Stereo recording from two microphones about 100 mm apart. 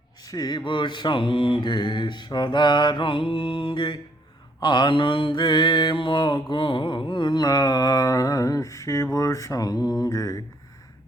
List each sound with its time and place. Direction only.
0.3 s mantra: 40° left (ahead or behind)
9.1 s speech: 35° left (ahead or behind)